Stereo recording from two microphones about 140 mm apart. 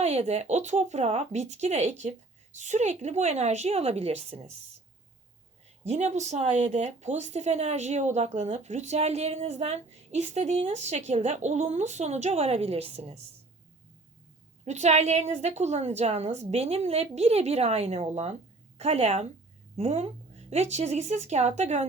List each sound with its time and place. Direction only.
0.0 s speech: 45° right (ahead or behind)
5.8 s speech: 55° right (ahead or behind)
14.6 s speech: 50° right (ahead or behind)